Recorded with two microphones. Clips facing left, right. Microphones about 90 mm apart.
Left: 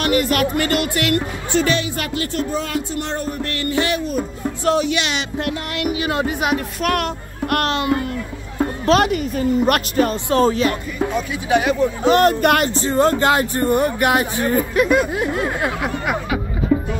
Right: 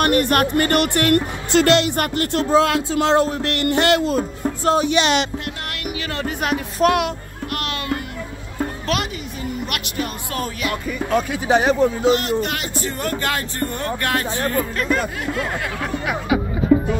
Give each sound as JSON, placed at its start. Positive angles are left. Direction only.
{"t": 0.0, "sound": "speech", "side_deg": -50}
{"t": 1.5, "sound": "speech", "side_deg": -90}
{"t": 4.6, "sound": "speech", "side_deg": -35}
{"t": 6.2, "sound": "speech", "side_deg": 5}
{"t": 6.8, "sound": "speech", "side_deg": -30}
{"t": 8.9, "sound": "speech", "side_deg": 25}
{"t": 9.7, "sound": "speech", "side_deg": 35}
{"t": 11.4, "sound": "speech", "side_deg": -35}
{"t": 12.0, "sound": "speech", "side_deg": 45}
{"t": 12.7, "sound": "speech", "side_deg": 25}
{"t": 15.1, "sound": "speech", "side_deg": 25}